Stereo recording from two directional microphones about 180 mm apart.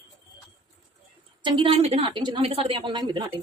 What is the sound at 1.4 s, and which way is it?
A woman's voice, 25° right (ahead or behind).